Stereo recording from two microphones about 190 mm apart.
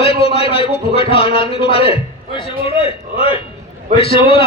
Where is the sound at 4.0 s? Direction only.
30° left (ahead or behind).